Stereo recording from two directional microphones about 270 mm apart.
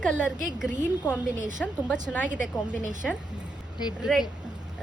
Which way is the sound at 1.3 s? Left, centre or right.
Right.